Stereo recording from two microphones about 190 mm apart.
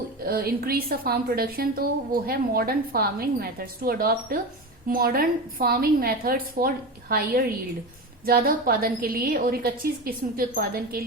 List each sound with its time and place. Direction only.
0.3 s a woman's voice: 55° right (ahead or behind)